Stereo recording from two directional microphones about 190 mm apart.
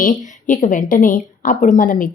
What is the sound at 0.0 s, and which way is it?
Speech, 45° left (ahead or behind).